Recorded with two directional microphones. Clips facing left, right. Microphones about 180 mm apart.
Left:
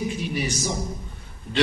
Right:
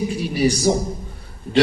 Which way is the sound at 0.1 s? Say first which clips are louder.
Right 8 dB; 35° right (ahead or behind).